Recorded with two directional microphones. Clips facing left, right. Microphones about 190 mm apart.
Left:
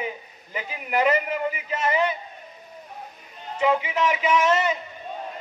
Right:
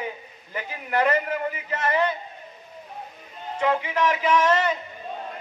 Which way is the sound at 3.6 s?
10° left (ahead or behind).